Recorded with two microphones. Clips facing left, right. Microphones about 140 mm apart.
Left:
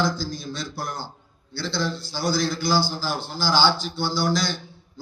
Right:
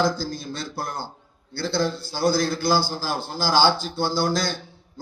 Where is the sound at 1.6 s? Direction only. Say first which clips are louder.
Right 3 dB; 45° right (ahead or behind).